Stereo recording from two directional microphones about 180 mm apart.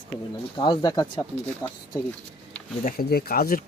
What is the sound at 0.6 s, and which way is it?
Speech, 25° left (ahead or behind).